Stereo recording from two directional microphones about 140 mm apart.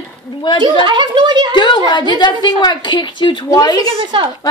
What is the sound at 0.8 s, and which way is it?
Speech, 35° right (ahead or behind).